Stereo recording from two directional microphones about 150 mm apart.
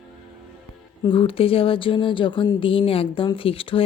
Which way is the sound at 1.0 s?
35° left (ahead or behind).